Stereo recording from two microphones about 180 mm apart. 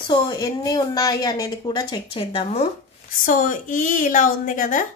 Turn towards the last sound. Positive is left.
turn(degrees=45)  # may be behind; listen again after turning